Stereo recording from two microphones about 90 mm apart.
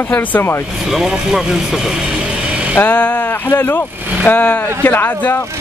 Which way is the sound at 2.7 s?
15° left (ahead or behind).